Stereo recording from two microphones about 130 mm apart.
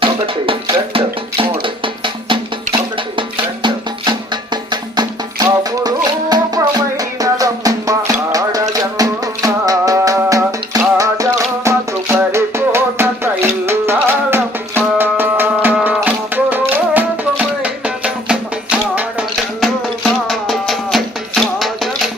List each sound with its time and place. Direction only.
0.0 s music: 40° right (ahead or behind); by 19.2 s 10° right (ahead or behind)
20.2 s music: centre (ahead or behind)